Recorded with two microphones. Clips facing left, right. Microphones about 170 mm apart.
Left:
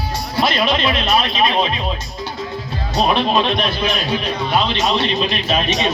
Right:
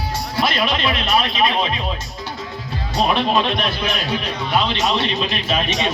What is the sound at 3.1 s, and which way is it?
A man's voice, 30° left (ahead or behind).